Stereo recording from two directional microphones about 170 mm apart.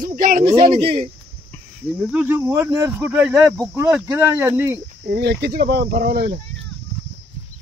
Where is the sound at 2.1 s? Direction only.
10° right (ahead or behind).